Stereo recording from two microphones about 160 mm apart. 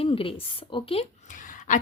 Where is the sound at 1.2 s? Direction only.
55° left (ahead or behind).